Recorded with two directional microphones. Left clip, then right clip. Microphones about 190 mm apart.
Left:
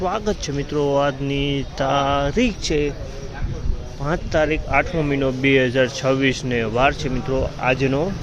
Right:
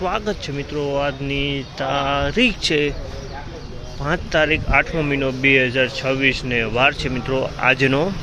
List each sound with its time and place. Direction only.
0.0 s speech: 15° left (ahead or behind)
0.5 s speech: 30° left (ahead or behind); by 2.9 s 5° left (ahead or behind)
4.0 s speech: 10° left (ahead or behind)